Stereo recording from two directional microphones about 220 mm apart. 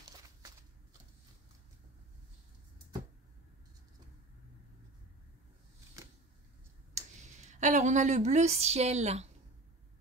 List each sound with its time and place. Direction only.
6.9 s speech: 35° right (ahead or behind)